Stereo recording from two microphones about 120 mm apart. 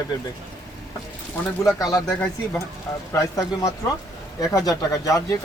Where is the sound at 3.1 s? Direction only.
30° left (ahead or behind).